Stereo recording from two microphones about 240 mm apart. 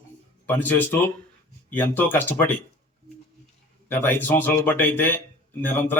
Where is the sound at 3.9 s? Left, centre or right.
Centre.